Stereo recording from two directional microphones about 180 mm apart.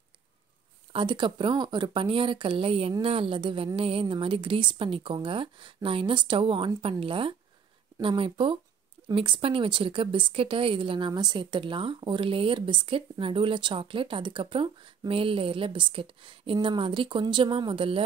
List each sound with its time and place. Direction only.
0.9 s a woman's voice: 25° right (ahead or behind)